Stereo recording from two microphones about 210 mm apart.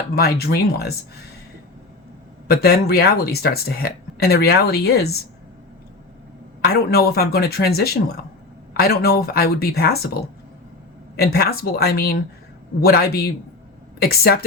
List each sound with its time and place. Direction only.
0.2 s speech: 45° left (ahead or behind)
2.5 s speech: 45° left (ahead or behind)
6.6 s speech: 45° left (ahead or behind)